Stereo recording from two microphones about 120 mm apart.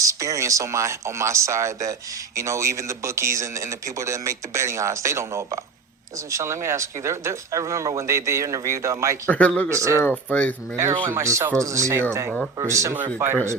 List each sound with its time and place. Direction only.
0.0 s speech: 25° right (ahead or behind)
9.2 s speech: 15° left (ahead or behind)
9.6 s speech: 25° right (ahead or behind)
10.0 s speech: 15° left (ahead or behind)
11.0 s speech: 20° right (ahead or behind)